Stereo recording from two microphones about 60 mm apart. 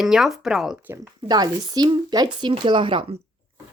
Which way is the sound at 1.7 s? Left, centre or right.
Right.